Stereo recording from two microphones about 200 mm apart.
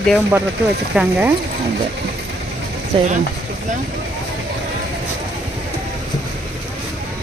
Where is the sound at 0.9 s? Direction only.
5° right (ahead or behind).